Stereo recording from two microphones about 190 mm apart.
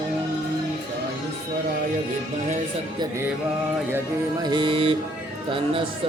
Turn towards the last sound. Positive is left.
turn(degrees=-25)  # may be behind; listen again after turning